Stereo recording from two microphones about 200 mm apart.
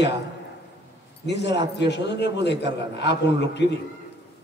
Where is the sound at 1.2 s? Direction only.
60° left (ahead or behind).